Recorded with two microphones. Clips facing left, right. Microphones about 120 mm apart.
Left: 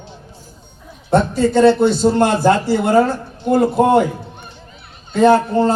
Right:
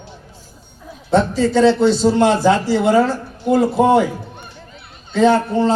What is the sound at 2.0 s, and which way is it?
Speech, 50° left (ahead or behind).